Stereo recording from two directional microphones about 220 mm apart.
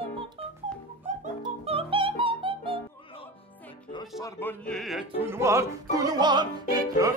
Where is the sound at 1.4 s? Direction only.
25° right (ahead or behind).